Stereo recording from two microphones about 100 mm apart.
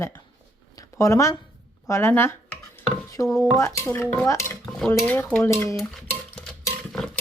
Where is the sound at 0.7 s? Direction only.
35° left (ahead or behind).